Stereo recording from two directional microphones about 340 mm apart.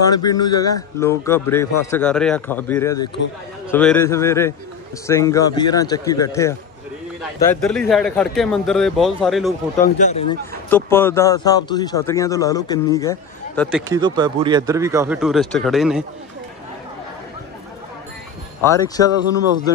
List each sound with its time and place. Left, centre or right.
0.1 s a man's voice: centre
9.9 s speech: left
10.7 s speech: centre
13.7 s speech: centre
18.7 s speech: centre